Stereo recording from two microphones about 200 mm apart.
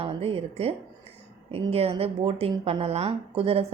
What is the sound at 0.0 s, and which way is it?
A woman's voice, 30° right (ahead or behind).